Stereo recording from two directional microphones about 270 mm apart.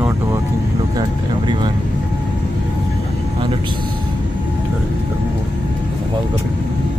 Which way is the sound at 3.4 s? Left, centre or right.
Centre.